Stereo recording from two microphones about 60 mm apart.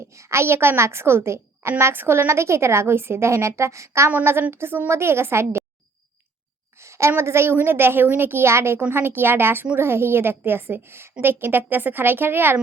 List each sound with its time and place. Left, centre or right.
0.1 s a woman's voice: right
4.2 s a woman's voice: right
6.7 s a sound: right
7.2 s a woman's voice: right
8.9 s a woman's voice: right